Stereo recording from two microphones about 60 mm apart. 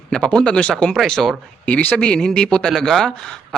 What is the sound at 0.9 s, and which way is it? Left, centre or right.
Speech, centre.